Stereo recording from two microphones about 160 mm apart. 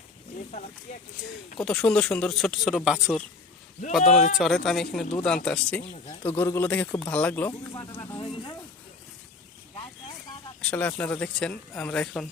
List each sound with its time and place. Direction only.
1.5 s speech: 5° left (ahead or behind)
4.4 s speech: centre (ahead or behind); by 8.2 s 15° left (ahead or behind)
8.2 s speech: 35° left (ahead or behind)
10.6 s speech: 10° left (ahead or behind)